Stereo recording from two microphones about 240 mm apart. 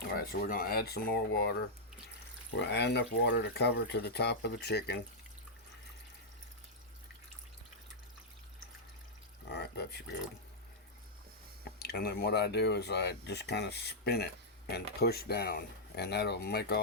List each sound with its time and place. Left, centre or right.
0.1 s speech: left
2.6 s speech: left
9.5 s a sound: left
11.6 s speech: left